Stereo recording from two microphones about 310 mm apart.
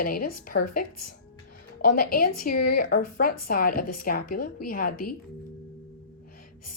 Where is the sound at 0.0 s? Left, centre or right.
Left.